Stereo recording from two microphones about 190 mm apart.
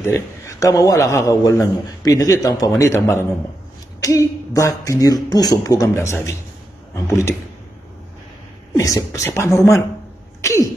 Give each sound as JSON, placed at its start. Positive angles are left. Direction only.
{"t": 0.0, "sound": "a man's voice", "side_deg": 15}
{"t": 8.7, "sound": "a man's voice", "side_deg": 15}